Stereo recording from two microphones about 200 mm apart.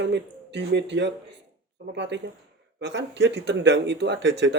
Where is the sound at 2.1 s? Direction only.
60° right (ahead or behind).